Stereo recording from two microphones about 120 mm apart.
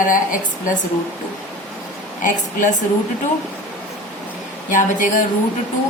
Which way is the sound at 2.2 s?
90° left.